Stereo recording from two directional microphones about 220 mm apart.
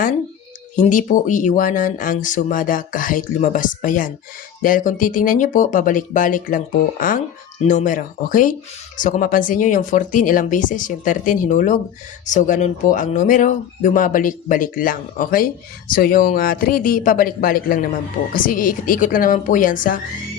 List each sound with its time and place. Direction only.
0.8 s speech: 35° left (ahead or behind)
7.7 s speech: 35° left (ahead or behind)